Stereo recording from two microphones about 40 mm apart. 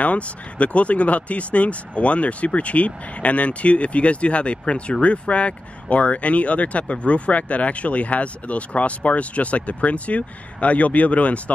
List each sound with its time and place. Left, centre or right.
0.0 s speech: left